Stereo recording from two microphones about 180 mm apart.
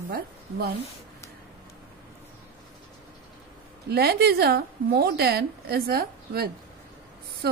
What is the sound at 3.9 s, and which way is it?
A woman's voice, 65° right (ahead or behind).